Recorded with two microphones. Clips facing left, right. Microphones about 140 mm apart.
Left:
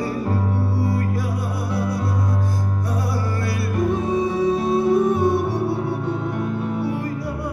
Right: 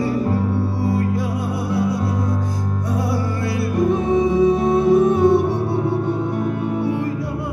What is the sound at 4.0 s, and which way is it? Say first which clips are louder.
Music: right 4 dB; 20° right (ahead or behind).